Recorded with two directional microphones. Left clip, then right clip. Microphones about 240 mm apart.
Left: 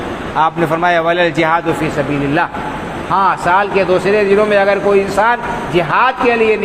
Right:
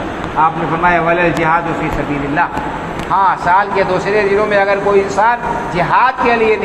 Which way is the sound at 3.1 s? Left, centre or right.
Left.